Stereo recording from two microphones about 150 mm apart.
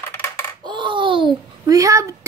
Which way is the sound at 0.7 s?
30° right (ahead or behind).